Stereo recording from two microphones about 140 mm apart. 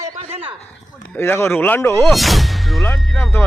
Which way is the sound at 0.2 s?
45° right (ahead or behind).